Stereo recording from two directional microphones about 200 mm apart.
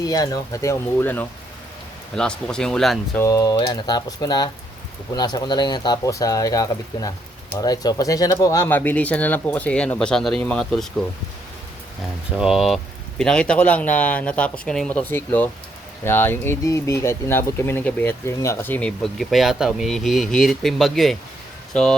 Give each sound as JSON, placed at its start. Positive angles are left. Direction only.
{"t": 0.0, "sound": "speech", "side_deg": 20}
{"t": 3.2, "sound": "speech", "side_deg": 15}
{"t": 12.4, "sound": "speech", "side_deg": 0}